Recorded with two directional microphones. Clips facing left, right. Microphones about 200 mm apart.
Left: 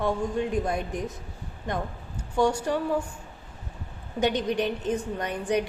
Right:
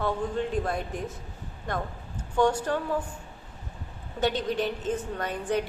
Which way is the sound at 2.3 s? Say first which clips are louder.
Even; 10° left (ahead or behind).